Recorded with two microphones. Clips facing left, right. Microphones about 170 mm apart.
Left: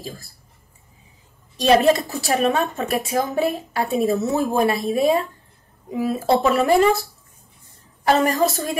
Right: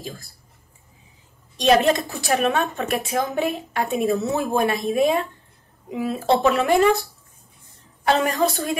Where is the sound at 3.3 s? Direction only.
35° left (ahead or behind).